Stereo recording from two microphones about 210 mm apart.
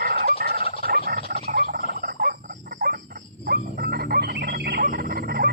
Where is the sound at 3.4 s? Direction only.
45° right (ahead or behind).